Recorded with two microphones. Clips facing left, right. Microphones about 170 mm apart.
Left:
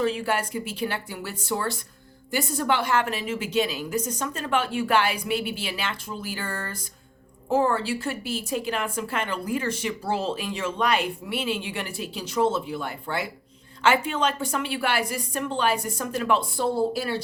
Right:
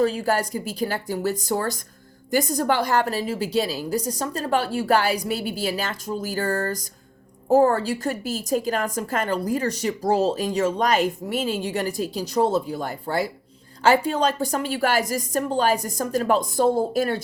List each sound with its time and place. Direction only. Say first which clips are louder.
0.0 s a woman's voice: right 4 dB; 40° right (ahead or behind)